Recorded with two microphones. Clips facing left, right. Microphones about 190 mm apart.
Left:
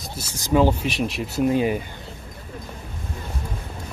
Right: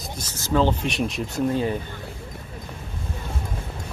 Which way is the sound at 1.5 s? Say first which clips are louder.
Left 4 dB; 15° left (ahead or behind).